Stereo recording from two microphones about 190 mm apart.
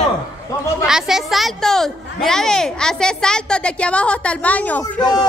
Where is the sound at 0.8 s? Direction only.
Centre (ahead or behind).